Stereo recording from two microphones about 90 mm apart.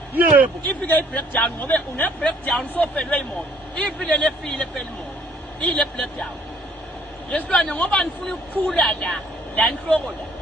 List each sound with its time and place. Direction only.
0.6 s speech: 20° left (ahead or behind)
7.3 s speech: 10° left (ahead or behind)